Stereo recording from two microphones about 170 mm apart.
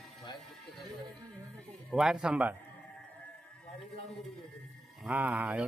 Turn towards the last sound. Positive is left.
turn(degrees=-5)  # may be behind; listen again after turning